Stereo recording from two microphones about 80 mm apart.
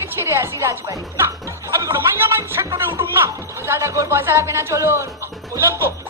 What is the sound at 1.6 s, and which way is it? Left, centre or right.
Speech, right.